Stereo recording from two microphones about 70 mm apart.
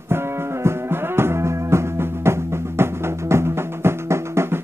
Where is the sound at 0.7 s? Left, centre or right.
Right.